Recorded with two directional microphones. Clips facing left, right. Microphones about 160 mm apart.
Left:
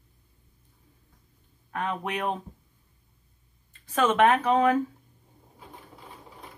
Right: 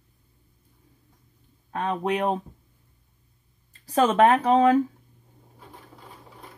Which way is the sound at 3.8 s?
35° right (ahead or behind).